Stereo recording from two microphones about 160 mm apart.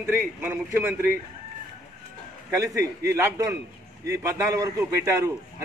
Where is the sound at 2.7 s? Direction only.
20° right (ahead or behind).